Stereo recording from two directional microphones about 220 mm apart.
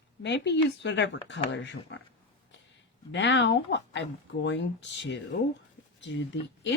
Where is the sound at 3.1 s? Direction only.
55° left (ahead or behind).